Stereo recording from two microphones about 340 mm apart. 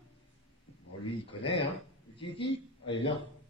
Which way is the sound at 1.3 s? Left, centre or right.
Centre.